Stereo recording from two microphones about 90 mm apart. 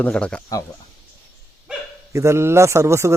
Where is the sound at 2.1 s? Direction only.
30° right (ahead or behind).